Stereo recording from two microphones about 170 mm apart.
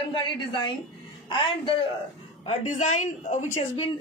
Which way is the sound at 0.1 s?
25° left (ahead or behind).